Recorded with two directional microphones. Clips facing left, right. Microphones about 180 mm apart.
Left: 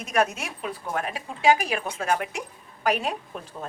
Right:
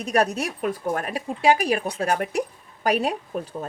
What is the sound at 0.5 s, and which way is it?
A woman's voice, 45° right (ahead or behind).